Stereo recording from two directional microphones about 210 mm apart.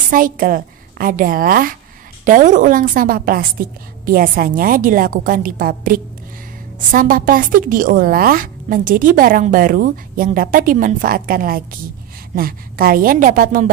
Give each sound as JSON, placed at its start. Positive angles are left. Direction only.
{"t": 0.1, "sound": "a woman's voice", "side_deg": -40}